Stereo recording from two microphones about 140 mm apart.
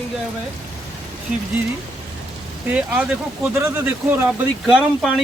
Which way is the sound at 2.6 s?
10° right (ahead or behind).